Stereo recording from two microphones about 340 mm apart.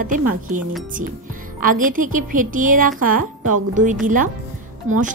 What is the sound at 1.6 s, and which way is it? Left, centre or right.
Speech, right.